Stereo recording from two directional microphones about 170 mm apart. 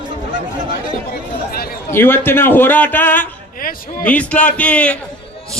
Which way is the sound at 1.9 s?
15° left (ahead or behind).